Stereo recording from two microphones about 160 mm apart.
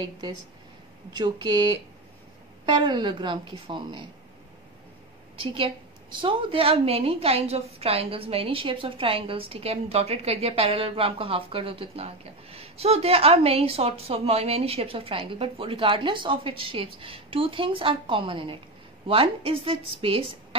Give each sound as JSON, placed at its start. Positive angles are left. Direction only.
{"t": 1.1, "sound": "a woman's voice", "side_deg": -25}
{"t": 5.4, "sound": "a woman's voice", "side_deg": -35}